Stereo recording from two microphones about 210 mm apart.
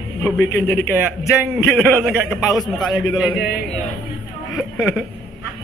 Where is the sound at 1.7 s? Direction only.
Centre (ahead or behind).